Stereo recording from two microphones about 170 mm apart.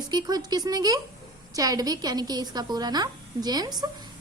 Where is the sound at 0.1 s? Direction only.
25° right (ahead or behind).